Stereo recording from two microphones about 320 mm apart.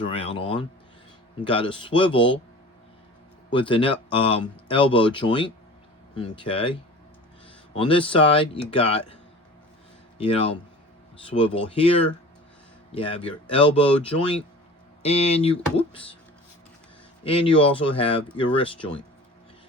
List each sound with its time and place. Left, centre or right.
0.0 s speech: centre
3.5 s speech: centre
7.8 s speech: centre
10.2 s speech: centre
15.0 s speech: centre
17.2 s speech: centre